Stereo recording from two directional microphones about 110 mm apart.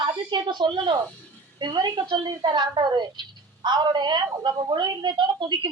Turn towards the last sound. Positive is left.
turn(degrees=-45)  # may be behind; listen again after turning